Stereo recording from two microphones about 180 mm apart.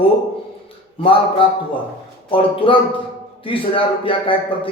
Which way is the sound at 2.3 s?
30° left (ahead or behind).